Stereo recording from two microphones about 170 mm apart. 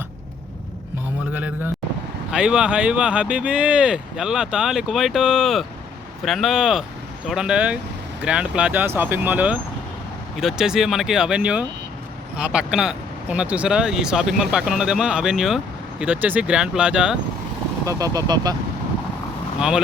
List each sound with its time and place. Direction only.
1.3 s a sound: 10° right (ahead or behind)
2.3 s speech: 5° right (ahead or behind)
17.8 s speech: 20° right (ahead or behind)
19.5 s speech: 5° right (ahead or behind)